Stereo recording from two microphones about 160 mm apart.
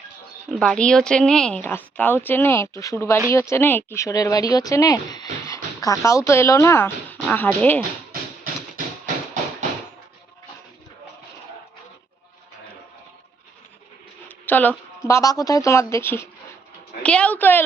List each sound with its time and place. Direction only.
0.6 s speech: 5° left (ahead or behind)
14.3 s speech: 10° left (ahead or behind)